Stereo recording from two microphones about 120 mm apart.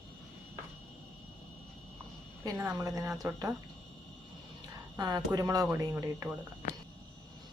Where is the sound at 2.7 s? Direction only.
25° right (ahead or behind).